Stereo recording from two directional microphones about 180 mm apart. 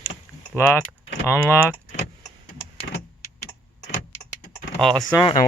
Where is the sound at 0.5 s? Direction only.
10° left (ahead or behind).